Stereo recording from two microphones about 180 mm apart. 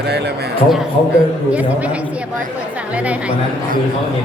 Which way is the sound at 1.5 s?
5° right (ahead or behind).